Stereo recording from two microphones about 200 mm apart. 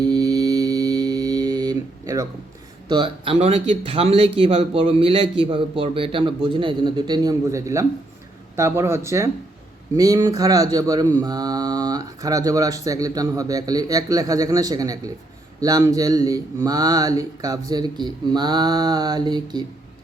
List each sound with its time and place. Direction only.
0.0 s mantra: 20° right (ahead or behind)
2.9 s a man's voice: 25° right (ahead or behind)
8.5 s mantra: 15° right (ahead or behind)
15.6 s a man's voice: 20° right (ahead or behind)